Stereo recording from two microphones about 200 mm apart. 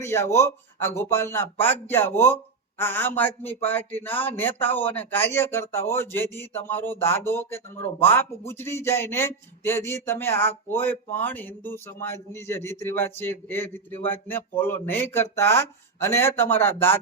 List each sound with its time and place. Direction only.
0.0 s speech: 15° left (ahead or behind)